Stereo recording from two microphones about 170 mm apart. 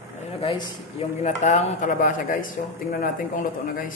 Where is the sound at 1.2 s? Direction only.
45° left (ahead or behind).